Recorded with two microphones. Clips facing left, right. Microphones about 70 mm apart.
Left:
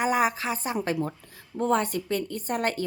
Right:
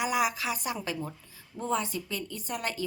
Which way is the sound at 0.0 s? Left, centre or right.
Left.